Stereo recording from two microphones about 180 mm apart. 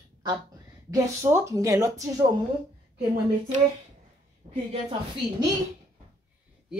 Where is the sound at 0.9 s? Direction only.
15° right (ahead or behind).